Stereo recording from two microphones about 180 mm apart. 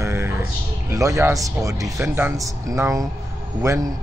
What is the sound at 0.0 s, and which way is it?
Speech, 15° right (ahead or behind).